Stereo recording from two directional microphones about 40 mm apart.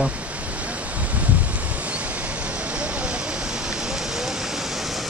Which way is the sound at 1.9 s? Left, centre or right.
Right.